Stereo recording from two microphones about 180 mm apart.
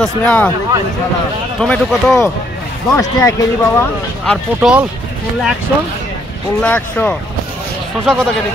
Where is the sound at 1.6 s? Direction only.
5° left (ahead or behind).